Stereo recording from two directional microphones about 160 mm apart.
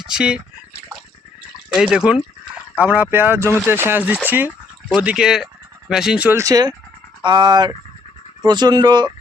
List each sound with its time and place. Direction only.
0.1 s speech: 5° right (ahead or behind)
1.7 s speech: 5° right (ahead or behind)
6.4 s speech: 25° right (ahead or behind)